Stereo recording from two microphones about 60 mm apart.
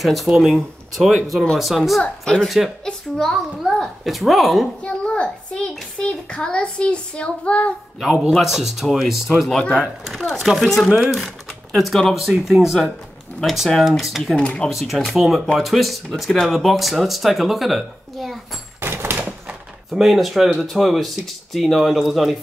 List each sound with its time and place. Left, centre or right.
0.0 s a woman's voice: centre
2.2 s a woman's voice: centre
4.8 s speech: centre
8.0 s a man's voice: centre
10.2 s a woman's voice: centre
11.2 s a sound: centre
12.1 s a woman's voice: centre
14.3 s speech: centre
14.7 s a woman's voice: centre
18.8 s a sound: right
19.9 s a woman's voice: centre